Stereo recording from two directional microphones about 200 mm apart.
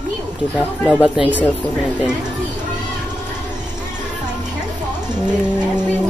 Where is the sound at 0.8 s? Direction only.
5° right (ahead or behind).